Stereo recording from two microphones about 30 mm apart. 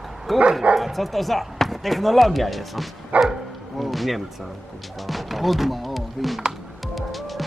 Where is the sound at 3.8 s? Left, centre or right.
Centre.